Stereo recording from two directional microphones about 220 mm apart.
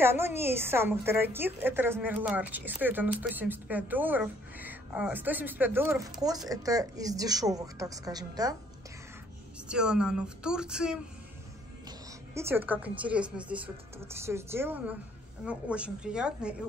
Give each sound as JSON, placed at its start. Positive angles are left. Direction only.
{"t": 0.0, "sound": "a woman's voice", "side_deg": -10}
{"t": 9.7, "sound": "a woman's voice", "side_deg": -5}
{"t": 12.4, "sound": "a woman's voice", "side_deg": -10}